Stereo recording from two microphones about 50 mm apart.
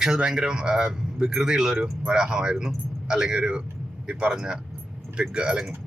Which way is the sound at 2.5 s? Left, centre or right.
Centre.